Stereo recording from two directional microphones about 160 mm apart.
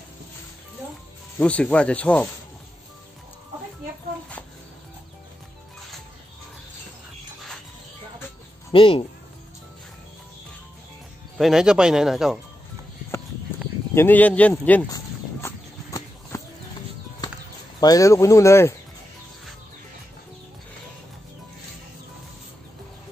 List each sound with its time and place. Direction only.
1.4 s speech: 5° left (ahead or behind)
8.7 s speech: 35° left (ahead or behind)
11.3 s speech: centre (ahead or behind)
13.9 s speech: 10° left (ahead or behind)
15.4 s a sound: 20° left (ahead or behind)
17.7 s speech: 25° left (ahead or behind)